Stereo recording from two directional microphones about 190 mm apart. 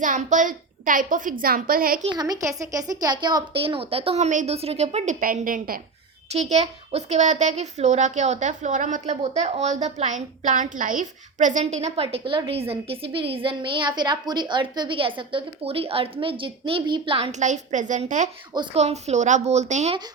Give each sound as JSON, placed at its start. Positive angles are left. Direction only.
{"t": 0.0, "sound": "a woman's voice", "side_deg": -40}
{"t": 2.0, "sound": "a woman's voice", "side_deg": -20}
{"t": 5.2, "sound": "a woman's voice", "side_deg": -45}
{"t": 6.3, "sound": "a woman's voice", "side_deg": -35}
{"t": 18.5, "sound": "a woman's voice", "side_deg": -30}